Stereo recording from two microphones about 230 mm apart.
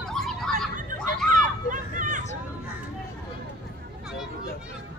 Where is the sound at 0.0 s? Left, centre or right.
Centre.